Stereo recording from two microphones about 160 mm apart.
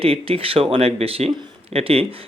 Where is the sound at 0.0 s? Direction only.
35° right (ahead or behind).